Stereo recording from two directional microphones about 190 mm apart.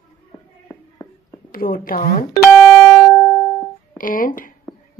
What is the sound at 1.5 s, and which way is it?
Speech, 50° left (ahead or behind).